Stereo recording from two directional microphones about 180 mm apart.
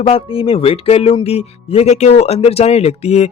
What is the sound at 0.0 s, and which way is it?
Speech, 30° left (ahead or behind).